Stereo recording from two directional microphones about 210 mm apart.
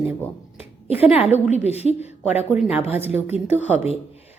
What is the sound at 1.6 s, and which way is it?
Speech, 30° left (ahead or behind).